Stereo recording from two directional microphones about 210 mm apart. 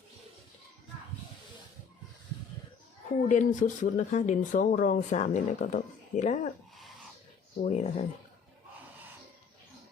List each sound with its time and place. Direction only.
3.2 s speech: 35° left (ahead or behind)
7.6 s speech: 30° left (ahead or behind)